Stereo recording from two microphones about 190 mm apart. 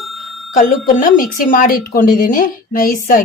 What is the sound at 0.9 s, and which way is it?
A woman's voice, 45° left (ahead or behind).